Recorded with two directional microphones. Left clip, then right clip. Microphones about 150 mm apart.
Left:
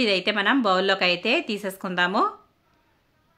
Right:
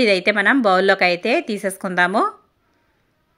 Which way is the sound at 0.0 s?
35° right (ahead or behind).